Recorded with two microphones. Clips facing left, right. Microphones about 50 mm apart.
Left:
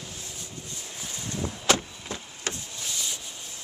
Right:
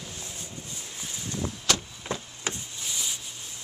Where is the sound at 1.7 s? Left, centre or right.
Left.